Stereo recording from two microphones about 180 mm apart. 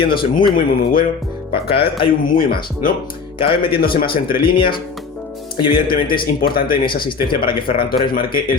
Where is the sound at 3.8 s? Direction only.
55° left (ahead or behind).